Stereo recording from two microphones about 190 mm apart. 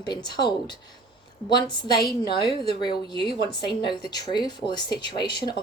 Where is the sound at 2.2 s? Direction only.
25° left (ahead or behind).